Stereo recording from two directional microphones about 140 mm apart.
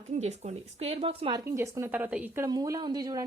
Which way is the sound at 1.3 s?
20° right (ahead or behind).